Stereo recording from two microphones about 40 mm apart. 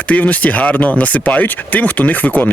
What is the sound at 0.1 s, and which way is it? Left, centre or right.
Speech, left.